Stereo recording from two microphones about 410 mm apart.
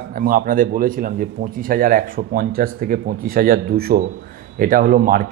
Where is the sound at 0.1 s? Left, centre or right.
Right.